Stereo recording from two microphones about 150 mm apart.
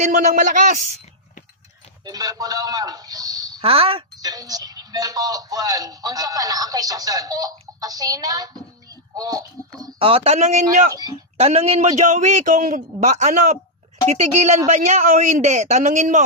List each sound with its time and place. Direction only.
0.0 s speech: 60° right (ahead or behind)
2.0 s speech: 25° right (ahead or behind)
3.6 s speech: 40° right (ahead or behind)
4.2 s speech: 25° right (ahead or behind)
10.0 s a man's voice: 40° right (ahead or behind)
10.9 s speech: 25° right (ahead or behind)
11.3 s a man's voice: 45° right (ahead or behind)